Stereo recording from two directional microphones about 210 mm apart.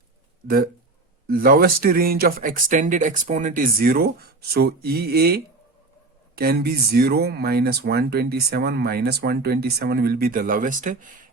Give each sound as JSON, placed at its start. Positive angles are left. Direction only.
{"t": 0.4, "sound": "speech", "side_deg": -45}